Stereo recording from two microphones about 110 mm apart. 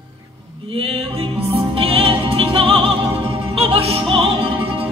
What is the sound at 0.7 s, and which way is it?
Music, 60° right (ahead or behind).